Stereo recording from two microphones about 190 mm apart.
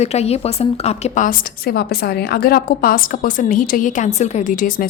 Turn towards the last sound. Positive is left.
turn(degrees=45)  # may be behind; listen again after turning